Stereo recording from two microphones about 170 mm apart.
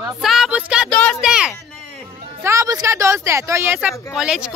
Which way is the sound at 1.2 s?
5° right (ahead or behind).